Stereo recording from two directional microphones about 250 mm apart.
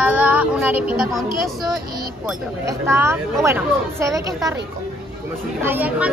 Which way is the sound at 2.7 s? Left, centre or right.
Centre.